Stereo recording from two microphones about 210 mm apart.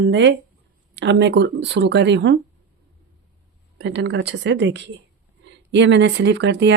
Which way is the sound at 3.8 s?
55° right (ahead or behind).